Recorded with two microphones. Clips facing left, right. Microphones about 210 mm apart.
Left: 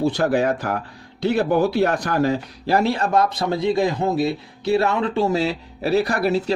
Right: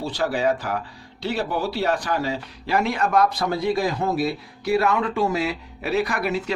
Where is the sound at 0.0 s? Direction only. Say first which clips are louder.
Left 4 dB; 50° left (ahead or behind).